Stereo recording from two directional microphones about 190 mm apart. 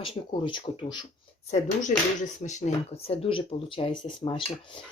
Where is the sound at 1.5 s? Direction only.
40° left (ahead or behind).